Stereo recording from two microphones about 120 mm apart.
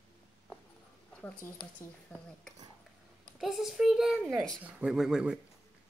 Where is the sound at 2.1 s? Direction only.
10° left (ahead or behind).